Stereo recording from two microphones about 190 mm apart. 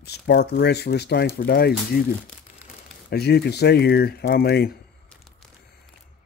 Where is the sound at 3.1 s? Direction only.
60° left (ahead or behind).